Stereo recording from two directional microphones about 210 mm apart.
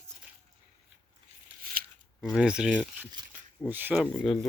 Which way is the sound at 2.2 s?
5° right (ahead or behind).